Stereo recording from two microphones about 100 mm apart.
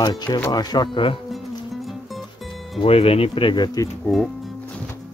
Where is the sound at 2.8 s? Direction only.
75° left (ahead or behind); by 3.9 s 45° left (ahead or behind).